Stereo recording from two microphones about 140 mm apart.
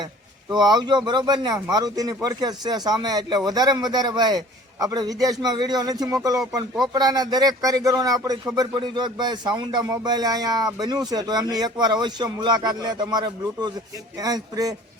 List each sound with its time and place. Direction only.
0.5 s speech: 30° right (ahead or behind)